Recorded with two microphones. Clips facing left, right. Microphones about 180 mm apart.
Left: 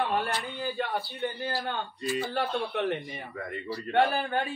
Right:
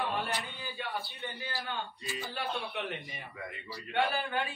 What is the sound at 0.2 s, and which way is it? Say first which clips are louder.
A man's voice: left 5 dB; 60° left (ahead or behind).